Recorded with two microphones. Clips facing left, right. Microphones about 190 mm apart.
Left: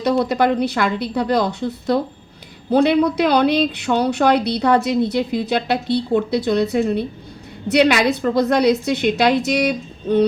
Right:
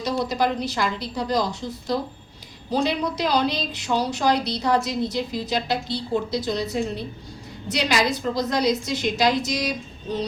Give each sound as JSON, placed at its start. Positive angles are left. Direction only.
{"t": 0.0, "sound": "speech", "side_deg": 60}